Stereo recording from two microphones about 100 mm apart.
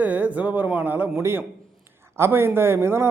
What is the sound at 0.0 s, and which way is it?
A man's voice, 15° right (ahead or behind).